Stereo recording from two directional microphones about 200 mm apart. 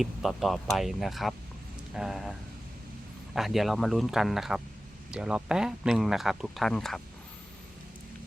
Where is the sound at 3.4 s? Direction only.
Centre (ahead or behind).